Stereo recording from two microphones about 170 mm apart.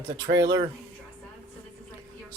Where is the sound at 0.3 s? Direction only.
25° right (ahead or behind).